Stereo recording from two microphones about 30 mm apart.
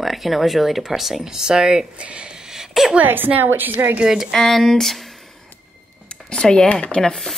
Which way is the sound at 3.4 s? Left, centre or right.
Right.